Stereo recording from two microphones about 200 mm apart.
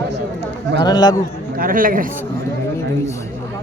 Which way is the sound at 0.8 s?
20° left (ahead or behind).